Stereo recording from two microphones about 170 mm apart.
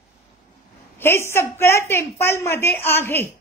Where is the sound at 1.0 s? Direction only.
15° left (ahead or behind).